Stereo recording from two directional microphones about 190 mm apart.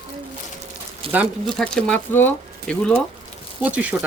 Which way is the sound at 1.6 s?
5° left (ahead or behind).